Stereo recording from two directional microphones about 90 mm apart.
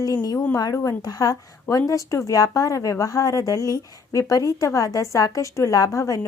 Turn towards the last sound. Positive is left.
turn(degrees=35)  # may be behind; listen again after turning